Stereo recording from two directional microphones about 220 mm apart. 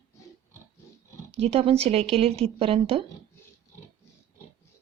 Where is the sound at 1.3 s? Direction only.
25° right (ahead or behind).